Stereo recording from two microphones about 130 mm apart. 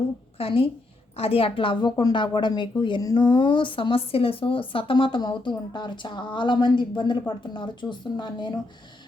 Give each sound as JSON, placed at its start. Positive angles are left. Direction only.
{"t": 0.3, "sound": "a woman's voice", "side_deg": 45}